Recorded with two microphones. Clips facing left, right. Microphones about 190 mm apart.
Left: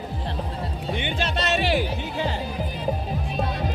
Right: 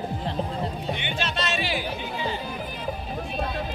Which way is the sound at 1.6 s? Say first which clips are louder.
Left 5 dB; 65° left (ahead or behind).